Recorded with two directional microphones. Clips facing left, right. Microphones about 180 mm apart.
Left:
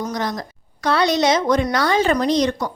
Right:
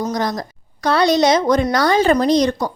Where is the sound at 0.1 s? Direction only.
40° right (ahead or behind).